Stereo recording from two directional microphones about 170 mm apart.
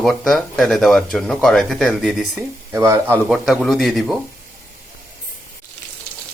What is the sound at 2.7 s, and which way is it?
Speech, 15° right (ahead or behind).